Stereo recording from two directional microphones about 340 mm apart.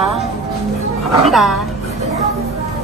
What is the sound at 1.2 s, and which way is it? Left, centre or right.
Speech, centre.